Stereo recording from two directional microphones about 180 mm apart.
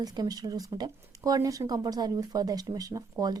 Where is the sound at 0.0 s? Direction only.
20° right (ahead or behind).